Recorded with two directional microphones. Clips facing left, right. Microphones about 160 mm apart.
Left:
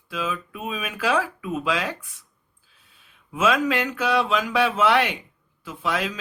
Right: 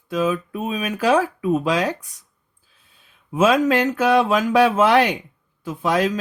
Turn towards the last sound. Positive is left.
turn(degrees=-40)  # may be behind; listen again after turning